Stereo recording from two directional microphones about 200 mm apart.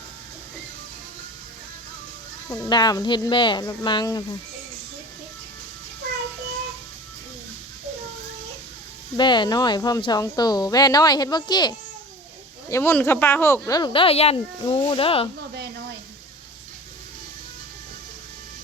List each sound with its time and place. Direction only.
2.5 s speech: 20° left (ahead or behind)
9.1 s speech: 20° left (ahead or behind)
12.7 s speech: 10° left (ahead or behind); by 15.3 s 25° left (ahead or behind)